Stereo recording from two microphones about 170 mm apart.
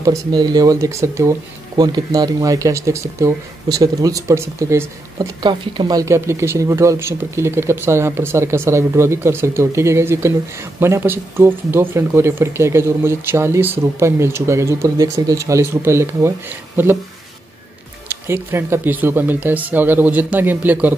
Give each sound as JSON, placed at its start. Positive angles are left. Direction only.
{"t": 0.0, "sound": "speech", "side_deg": -20}
{"t": 18.2, "sound": "speech", "side_deg": -15}